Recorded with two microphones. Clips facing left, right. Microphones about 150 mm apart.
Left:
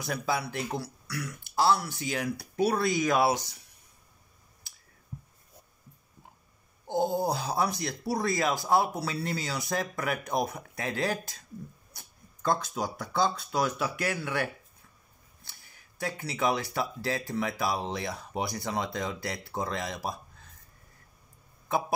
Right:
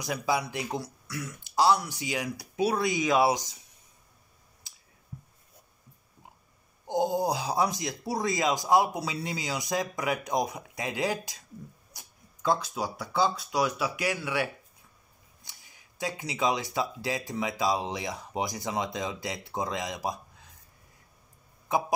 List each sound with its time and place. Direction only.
0.0 s speech: 15° right (ahead or behind)
6.9 s speech: 15° right (ahead or behind)
21.7 s speech: 15° right (ahead or behind)